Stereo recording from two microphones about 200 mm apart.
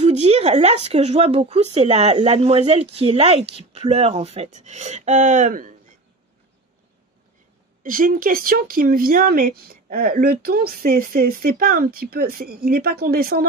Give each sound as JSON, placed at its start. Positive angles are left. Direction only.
{"t": 0.0, "sound": "speech", "side_deg": -35}
{"t": 7.8, "sound": "speech", "side_deg": -45}